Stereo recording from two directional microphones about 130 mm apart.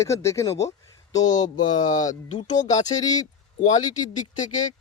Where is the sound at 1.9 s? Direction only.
70° left (ahead or behind).